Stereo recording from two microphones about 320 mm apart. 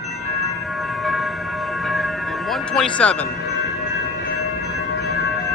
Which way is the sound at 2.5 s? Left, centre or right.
Centre.